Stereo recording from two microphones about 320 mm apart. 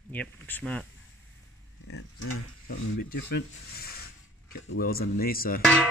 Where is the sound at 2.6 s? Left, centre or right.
Left.